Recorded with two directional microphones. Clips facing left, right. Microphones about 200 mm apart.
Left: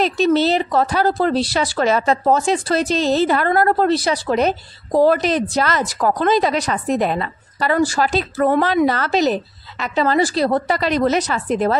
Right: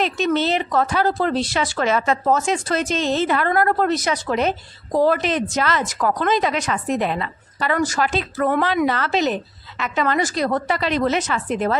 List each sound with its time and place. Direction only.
0.0 s speech: 35° left (ahead or behind)